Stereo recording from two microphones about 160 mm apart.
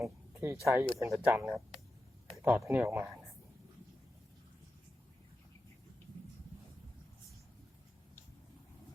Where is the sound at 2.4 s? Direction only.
5° right (ahead or behind).